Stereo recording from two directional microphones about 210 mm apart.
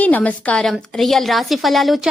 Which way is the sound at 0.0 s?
5° left (ahead or behind).